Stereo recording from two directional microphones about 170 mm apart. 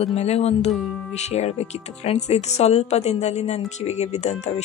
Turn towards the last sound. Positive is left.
turn(degrees=40)  # may be behind; listen again after turning